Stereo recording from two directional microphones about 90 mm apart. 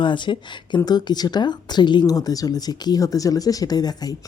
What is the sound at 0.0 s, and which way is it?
Speech, 65° left (ahead or behind).